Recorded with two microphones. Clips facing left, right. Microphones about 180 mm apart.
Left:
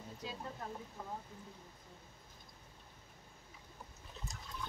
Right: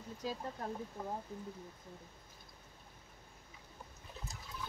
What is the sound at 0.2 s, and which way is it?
Speech, 40° right (ahead or behind).